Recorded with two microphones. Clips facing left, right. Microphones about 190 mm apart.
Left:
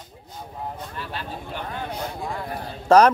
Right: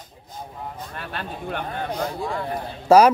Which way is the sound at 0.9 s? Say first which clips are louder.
Right 1 dB; 60° right (ahead or behind).